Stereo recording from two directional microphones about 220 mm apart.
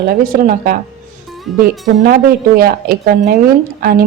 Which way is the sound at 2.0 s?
40° right (ahead or behind).